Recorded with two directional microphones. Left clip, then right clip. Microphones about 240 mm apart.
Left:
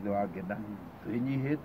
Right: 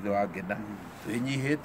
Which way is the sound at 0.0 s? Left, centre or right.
Centre.